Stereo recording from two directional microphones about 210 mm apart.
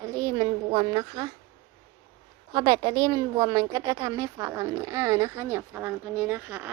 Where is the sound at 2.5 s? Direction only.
25° right (ahead or behind).